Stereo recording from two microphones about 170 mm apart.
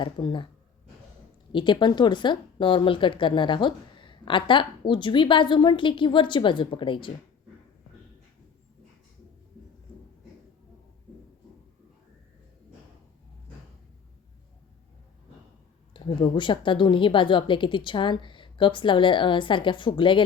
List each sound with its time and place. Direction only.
0.0 s speech: 30° left (ahead or behind)
1.5 s speech: 30° left (ahead or behind)
15.9 s speech: 30° left (ahead or behind)